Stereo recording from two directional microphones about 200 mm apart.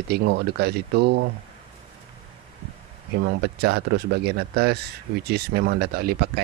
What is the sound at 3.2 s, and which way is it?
Speech, 55° right (ahead or behind).